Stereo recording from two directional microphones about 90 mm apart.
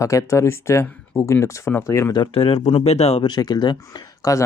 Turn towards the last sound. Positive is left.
turn(degrees=40)  # may be behind; listen again after turning